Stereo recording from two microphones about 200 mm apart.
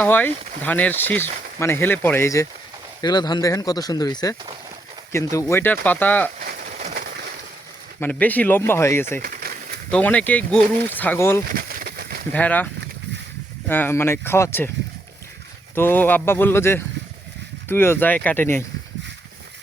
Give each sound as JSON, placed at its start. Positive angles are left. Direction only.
{"t": 0.0, "sound": "speech", "side_deg": 10}
{"t": 6.4, "sound": "a sound", "side_deg": -45}
{"t": 8.0, "sound": "speech", "side_deg": 10}
{"t": 9.2, "sound": "a sound", "side_deg": -50}
{"t": 9.9, "sound": "speech", "side_deg": 5}
{"t": 11.5, "sound": "a sound", "side_deg": -45}
{"t": 12.3, "sound": "speech", "side_deg": 5}
{"t": 13.7, "sound": "speech", "side_deg": 10}
{"t": 15.7, "sound": "speech", "side_deg": 10}